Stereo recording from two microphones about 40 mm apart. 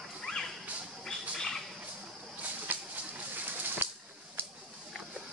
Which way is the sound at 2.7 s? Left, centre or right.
Right.